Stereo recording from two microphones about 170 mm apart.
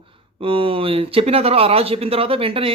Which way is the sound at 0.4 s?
30° right (ahead or behind).